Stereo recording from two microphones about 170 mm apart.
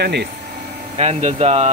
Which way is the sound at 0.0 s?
80° right.